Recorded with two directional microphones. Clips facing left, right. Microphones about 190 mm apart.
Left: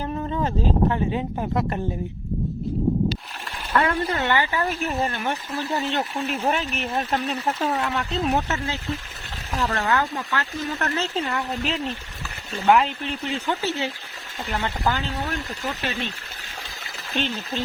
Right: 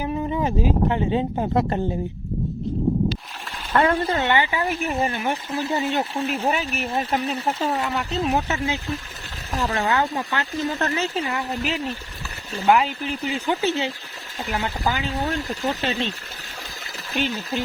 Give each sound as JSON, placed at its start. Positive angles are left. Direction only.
{"t": 0.0, "sound": "a sound", "side_deg": -10}
{"t": 1.1, "sound": "speech", "side_deg": -25}
{"t": 3.7, "sound": "speech", "side_deg": -30}
{"t": 5.3, "sound": "speech", "side_deg": -20}
{"t": 6.3, "sound": "speech", "side_deg": -5}
{"t": 9.8, "sound": "speech", "side_deg": -25}
{"t": 10.9, "sound": "speech", "side_deg": -10}
{"t": 15.1, "sound": "speech", "side_deg": -30}
{"t": 17.2, "sound": "speech", "side_deg": -10}